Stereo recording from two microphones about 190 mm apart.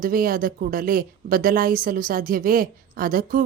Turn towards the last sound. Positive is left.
turn(degrees=-50)  # may be behind; listen again after turning